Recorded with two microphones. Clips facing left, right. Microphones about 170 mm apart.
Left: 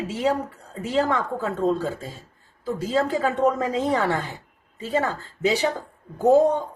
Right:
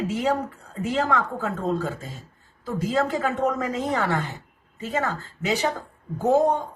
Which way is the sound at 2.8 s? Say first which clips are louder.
Left 1 dB; 35° left (ahead or behind).